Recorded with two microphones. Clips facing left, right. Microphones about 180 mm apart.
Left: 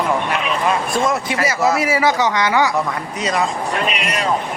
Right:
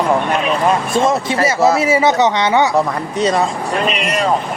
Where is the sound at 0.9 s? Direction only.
25° right (ahead or behind).